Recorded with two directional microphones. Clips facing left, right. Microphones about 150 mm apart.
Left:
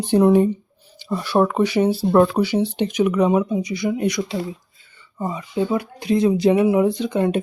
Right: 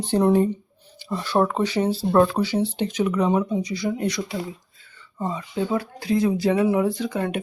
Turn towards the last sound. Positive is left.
turn(degrees=20)  # may be behind; listen again after turning